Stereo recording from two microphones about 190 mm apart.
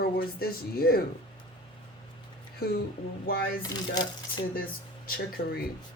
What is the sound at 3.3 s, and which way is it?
Speech, 50° left (ahead or behind).